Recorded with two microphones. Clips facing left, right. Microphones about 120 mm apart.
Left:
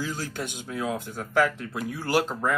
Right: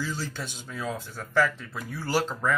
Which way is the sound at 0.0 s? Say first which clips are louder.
Left 2 dB; 50° left (ahead or behind).